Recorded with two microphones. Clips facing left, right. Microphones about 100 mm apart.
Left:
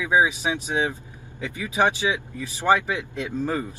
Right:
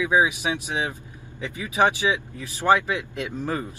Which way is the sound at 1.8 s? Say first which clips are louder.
Right 1 dB; 20° left (ahead or behind).